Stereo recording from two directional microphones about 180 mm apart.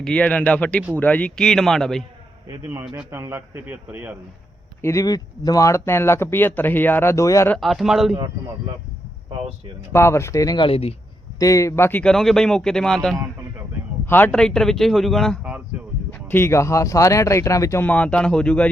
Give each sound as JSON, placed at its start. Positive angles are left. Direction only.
{"t": 0.0, "sound": "speech", "side_deg": 5}
{"t": 2.5, "sound": "a man's voice", "side_deg": -15}
{"t": 4.8, "sound": "speech", "side_deg": 15}
{"t": 7.5, "sound": "speech", "side_deg": 0}
{"t": 8.1, "sound": "a man's voice", "side_deg": -30}
{"t": 9.9, "sound": "speech", "side_deg": 15}
{"t": 11.3, "sound": "speech", "side_deg": 20}
{"t": 16.1, "sound": "speech", "side_deg": 10}